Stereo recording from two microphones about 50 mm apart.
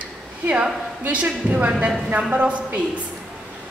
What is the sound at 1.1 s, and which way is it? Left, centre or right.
A woman's voice, right.